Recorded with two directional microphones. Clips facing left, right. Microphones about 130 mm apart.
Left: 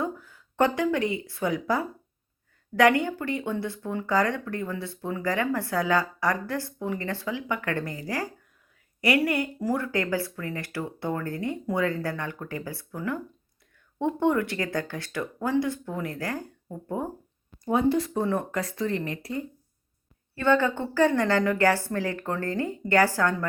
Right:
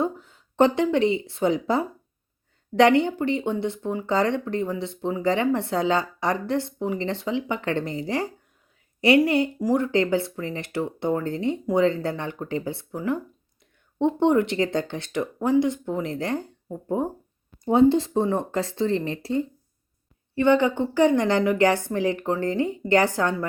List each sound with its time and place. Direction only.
0.0 s a woman's voice: 25° right (ahead or behind)
14.0 s speech: 25° right (ahead or behind)
20.3 s a woman's voice: 15° right (ahead or behind)